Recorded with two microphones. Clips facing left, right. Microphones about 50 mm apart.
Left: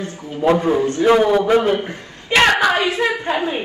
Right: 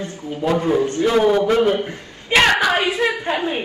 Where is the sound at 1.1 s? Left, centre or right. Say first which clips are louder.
Left 1 dB; centre.